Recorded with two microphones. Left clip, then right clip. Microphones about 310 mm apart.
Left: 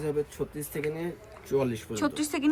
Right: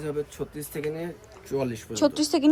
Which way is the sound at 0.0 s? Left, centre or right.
Centre.